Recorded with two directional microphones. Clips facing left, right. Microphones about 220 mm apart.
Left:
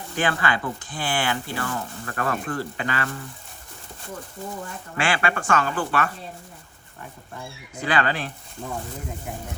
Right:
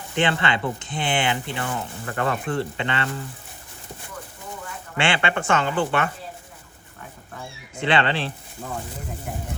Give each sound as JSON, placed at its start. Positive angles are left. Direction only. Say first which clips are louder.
{"t": 0.2, "sound": "speech", "louder": "right 2 dB", "side_deg": -25}
{"t": 4.9, "sound": "speech", "louder": "right 1 dB", "side_deg": -25}
{"t": 7.8, "sound": "speech", "louder": "right 2 dB", "side_deg": -25}